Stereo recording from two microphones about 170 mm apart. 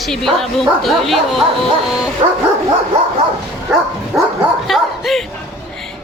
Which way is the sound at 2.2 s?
35° right (ahead or behind).